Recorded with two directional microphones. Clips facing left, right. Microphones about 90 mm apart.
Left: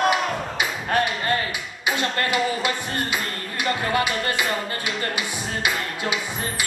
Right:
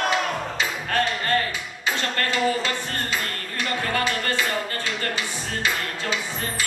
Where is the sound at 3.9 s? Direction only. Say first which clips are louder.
Left 2 dB; 15° left (ahead or behind).